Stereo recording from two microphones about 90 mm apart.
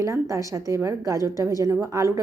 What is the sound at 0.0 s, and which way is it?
A woman's voice, 35° right (ahead or behind).